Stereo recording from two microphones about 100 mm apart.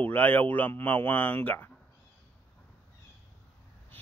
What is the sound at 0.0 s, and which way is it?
Speech, 15° left (ahead or behind).